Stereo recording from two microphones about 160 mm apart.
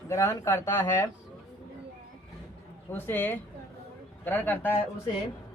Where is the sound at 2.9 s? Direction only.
10° left (ahead or behind).